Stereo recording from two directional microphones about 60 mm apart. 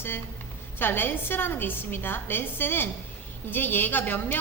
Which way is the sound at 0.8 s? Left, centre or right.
Left.